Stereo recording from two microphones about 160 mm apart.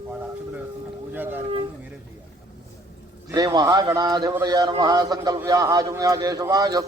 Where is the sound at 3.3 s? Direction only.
25° right (ahead or behind).